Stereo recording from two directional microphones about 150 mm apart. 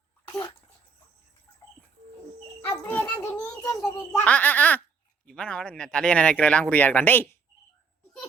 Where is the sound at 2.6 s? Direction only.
15° left (ahead or behind).